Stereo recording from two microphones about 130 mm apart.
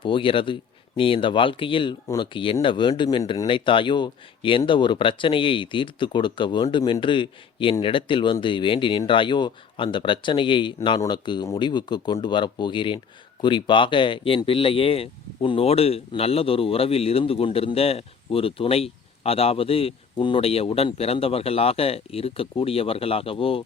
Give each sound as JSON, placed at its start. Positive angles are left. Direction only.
{"t": 0.0, "sound": "speech", "side_deg": 40}